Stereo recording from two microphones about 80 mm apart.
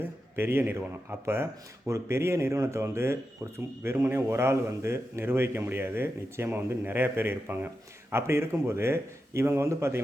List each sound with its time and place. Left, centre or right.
0.0 s a man's voice: right